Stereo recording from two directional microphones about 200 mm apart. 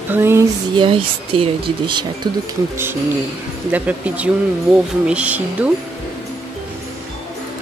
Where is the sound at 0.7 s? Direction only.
25° right (ahead or behind).